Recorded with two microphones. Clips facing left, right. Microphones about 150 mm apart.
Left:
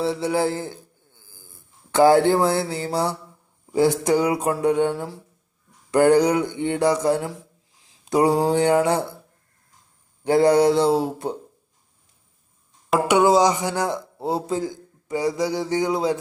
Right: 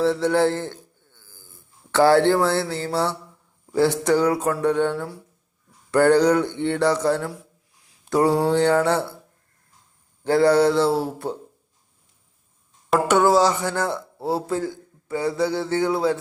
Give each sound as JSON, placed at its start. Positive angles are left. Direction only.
{"t": 0.0, "sound": "a man's voice", "side_deg": 10}
{"t": 7.9, "sound": "a sound", "side_deg": 15}
{"t": 8.4, "sound": "a man's voice", "side_deg": 15}
{"t": 10.2, "sound": "a man's voice", "side_deg": 15}
{"t": 13.1, "sound": "a man's voice", "side_deg": 15}